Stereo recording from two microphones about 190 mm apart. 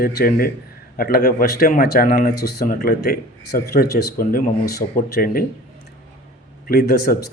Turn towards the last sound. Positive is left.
turn(degrees=50)  # may be behind; listen again after turning